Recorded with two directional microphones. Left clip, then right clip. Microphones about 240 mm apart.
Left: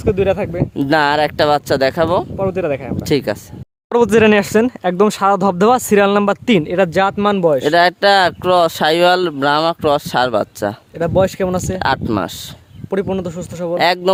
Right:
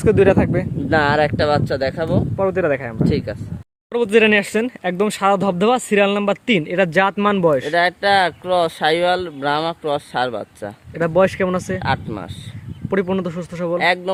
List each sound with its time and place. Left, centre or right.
0.0 s speech: centre
0.9 s speech: left
2.4 s a man's voice: centre
3.1 s speech: left
3.9 s speech: left; by 7.6 s centre
7.7 s speech: left
11.3 s a man's voice: centre
11.8 s speech: left
12.9 s a man's voice: centre
13.7 s speech: left